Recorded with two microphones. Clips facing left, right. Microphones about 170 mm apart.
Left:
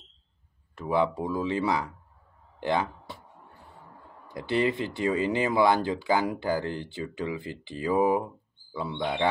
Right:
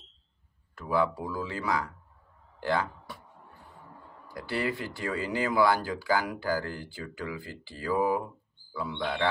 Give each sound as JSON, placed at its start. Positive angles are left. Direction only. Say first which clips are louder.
{"t": 0.7, "sound": "speech", "louder": "left 2 dB", "side_deg": 25}
{"t": 4.3, "sound": "speech", "louder": "left 5 dB", "side_deg": 20}